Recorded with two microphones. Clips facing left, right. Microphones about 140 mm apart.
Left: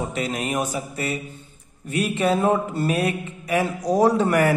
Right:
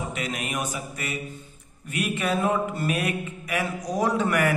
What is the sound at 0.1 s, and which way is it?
A man's voice, 35° left (ahead or behind).